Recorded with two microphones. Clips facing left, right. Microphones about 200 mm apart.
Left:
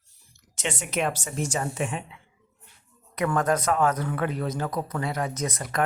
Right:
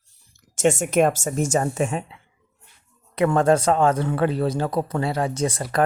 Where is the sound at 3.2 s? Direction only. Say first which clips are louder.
Right 6 dB; 30° right (ahead or behind).